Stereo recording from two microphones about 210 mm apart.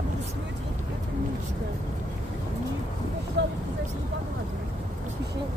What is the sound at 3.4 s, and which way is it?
Speech, 55° right (ahead or behind).